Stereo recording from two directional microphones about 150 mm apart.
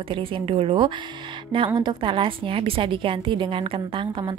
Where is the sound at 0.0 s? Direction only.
35° right (ahead or behind).